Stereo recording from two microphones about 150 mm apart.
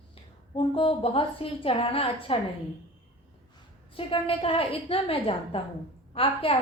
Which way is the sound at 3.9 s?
35° left (ahead or behind).